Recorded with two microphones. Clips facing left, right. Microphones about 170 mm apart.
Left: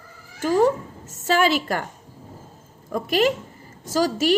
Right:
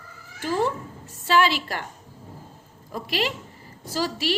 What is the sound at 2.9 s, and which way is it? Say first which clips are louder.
Speech: left 7 dB; 50° left (ahead or behind).